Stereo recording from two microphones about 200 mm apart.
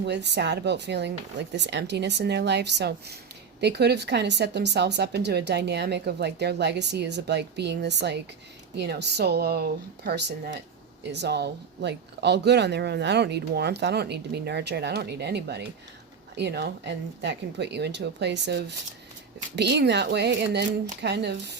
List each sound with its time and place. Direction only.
0.0 s speech: 60° right (ahead or behind)